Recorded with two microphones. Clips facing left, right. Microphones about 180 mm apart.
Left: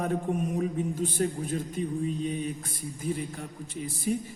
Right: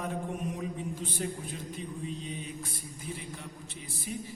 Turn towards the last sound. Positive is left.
turn(degrees=40)  # may be behind; listen again after turning